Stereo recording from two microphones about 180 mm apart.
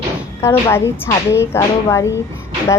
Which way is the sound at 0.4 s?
15° left (ahead or behind).